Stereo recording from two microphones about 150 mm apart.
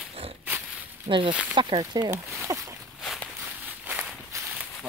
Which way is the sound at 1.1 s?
35° right (ahead or behind).